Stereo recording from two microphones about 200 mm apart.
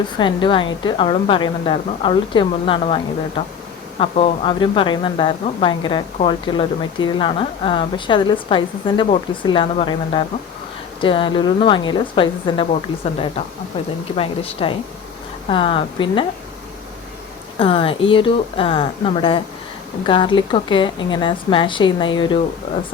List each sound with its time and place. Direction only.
0.2 s speech: 25° left (ahead or behind)
13.7 s speech: 25° left (ahead or behind)
17.6 s speech: 25° left (ahead or behind)